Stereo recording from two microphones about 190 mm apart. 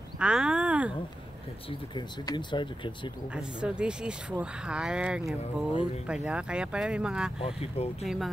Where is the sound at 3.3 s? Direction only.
5° right (ahead or behind).